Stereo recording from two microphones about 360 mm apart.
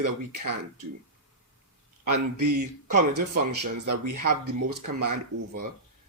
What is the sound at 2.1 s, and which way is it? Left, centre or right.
Speech, right.